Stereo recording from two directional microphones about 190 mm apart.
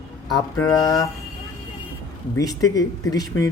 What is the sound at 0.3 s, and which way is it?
Speech, 15° left (ahead or behind).